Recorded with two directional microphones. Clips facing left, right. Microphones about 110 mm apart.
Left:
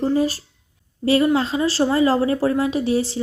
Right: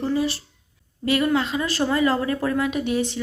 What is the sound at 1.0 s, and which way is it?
A woman's voice, 30° left (ahead or behind).